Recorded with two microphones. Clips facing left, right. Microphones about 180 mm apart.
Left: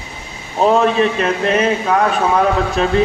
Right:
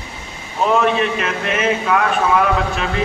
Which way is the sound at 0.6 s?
35° left (ahead or behind).